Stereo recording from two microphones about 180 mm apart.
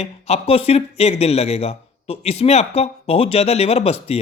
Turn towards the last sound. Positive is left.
turn(degrees=35)  # may be behind; listen again after turning